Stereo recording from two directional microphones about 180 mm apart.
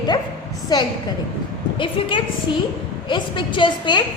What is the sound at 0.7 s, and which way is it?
A woman's voice, 20° left (ahead or behind).